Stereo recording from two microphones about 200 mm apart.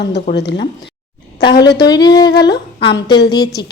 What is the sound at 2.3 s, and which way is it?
Humming, 55° left (ahead or behind).